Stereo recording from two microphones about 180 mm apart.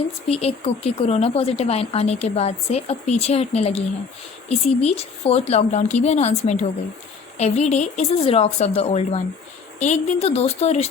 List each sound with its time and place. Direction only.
0.3 s a woman's voice: 35° left (ahead or behind)